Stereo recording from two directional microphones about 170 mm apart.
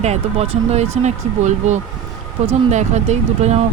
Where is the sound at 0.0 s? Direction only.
40° right (ahead or behind).